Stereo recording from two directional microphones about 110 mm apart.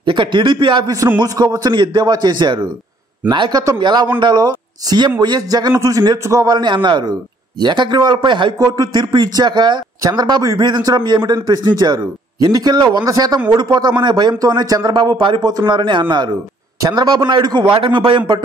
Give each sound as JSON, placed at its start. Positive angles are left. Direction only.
{"t": 0.0, "sound": "a man's voice", "side_deg": -45}
{"t": 1.2, "sound": "a man's voice", "side_deg": -35}
{"t": 5.8, "sound": "a man's voice", "side_deg": -30}